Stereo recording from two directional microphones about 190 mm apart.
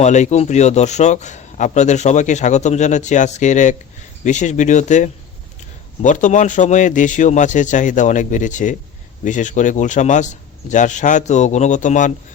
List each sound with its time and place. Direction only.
0.0 s a man's voice: 40° left (ahead or behind)